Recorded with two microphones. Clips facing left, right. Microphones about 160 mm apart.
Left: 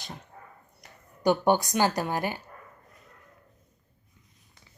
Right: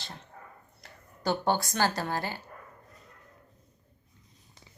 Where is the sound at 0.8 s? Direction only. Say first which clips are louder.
Left 6 dB; 15° left (ahead or behind).